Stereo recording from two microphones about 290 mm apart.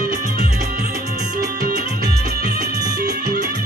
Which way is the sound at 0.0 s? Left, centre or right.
Right.